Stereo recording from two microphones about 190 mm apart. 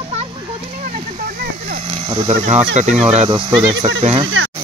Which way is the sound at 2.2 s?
35° right (ahead or behind).